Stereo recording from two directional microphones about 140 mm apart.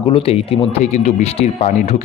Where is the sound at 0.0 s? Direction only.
40° left (ahead or behind).